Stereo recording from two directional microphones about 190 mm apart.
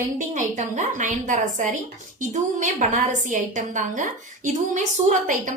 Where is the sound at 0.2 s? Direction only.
40° right (ahead or behind).